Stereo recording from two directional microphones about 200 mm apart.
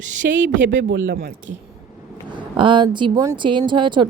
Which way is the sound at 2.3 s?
25° right (ahead or behind).